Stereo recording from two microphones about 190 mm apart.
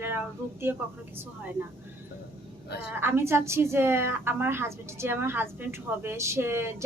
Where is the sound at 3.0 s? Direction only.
10° right (ahead or behind).